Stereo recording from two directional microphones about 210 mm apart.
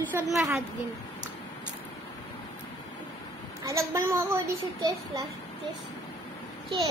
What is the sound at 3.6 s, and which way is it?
Speech, 15° right (ahead or behind).